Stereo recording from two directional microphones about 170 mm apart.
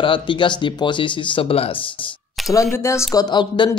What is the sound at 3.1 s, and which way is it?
Speech, 25° left (ahead or behind).